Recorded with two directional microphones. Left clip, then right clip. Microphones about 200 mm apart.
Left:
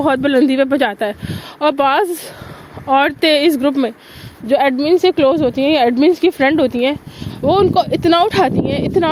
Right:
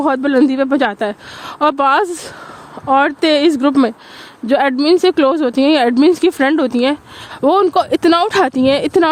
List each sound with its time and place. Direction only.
0.0 s speech: 20° right (ahead or behind)
7.4 s speech: 45° right (ahead or behind)